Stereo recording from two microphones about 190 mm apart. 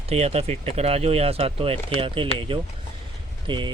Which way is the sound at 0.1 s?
35° right (ahead or behind).